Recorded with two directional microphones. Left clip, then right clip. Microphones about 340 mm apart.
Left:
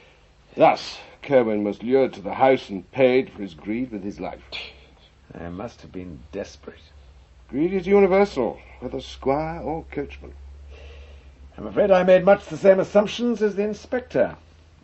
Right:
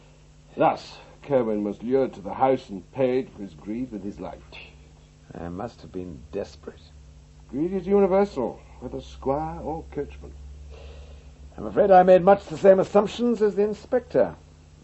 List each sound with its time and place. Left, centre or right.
0.5 s speech: right
5.3 s a man's voice: right
7.5 s speech: centre
11.5 s a man's voice: right